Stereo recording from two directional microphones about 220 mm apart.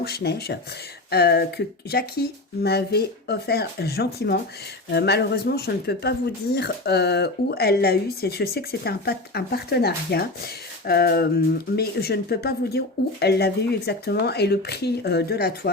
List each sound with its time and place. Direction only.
0.0 s speech: 45° left (ahead or behind)